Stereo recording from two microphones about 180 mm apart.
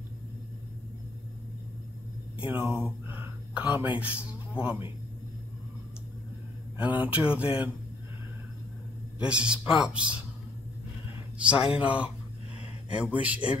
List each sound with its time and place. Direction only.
2.4 s speech: 10° right (ahead or behind)
3.1 s a sound: 10° right (ahead or behind)
3.7 s speech: 10° right (ahead or behind)
6.8 s speech: 10° right (ahead or behind)
9.2 s a man's voice: 5° right (ahead or behind)
11.5 s speech: 30° left (ahead or behind)
11.8 s speech: 5° right (ahead or behind)